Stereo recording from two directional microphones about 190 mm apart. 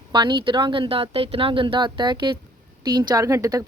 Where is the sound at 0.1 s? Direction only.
25° right (ahead or behind).